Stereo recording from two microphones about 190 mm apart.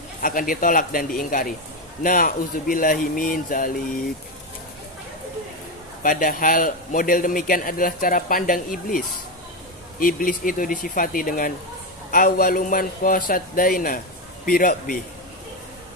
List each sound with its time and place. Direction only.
0.2 s a man's voice: 45° left (ahead or behind)
6.0 s a man's voice: 45° left (ahead or behind)